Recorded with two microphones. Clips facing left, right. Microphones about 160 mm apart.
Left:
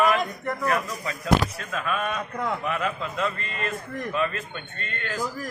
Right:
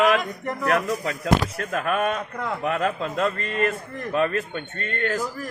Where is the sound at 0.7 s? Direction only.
70° right (ahead or behind).